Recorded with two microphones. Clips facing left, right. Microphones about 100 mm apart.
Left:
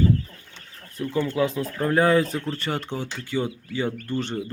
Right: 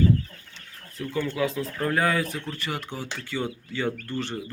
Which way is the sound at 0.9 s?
20° left (ahead or behind).